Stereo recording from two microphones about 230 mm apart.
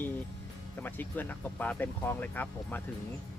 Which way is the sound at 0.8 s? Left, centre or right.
Centre.